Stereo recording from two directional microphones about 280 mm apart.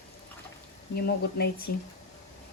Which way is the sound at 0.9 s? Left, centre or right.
Left.